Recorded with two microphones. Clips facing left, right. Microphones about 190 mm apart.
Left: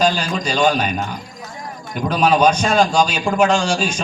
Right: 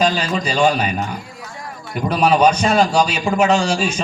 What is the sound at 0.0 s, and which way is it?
A man's voice, 5° right (ahead or behind).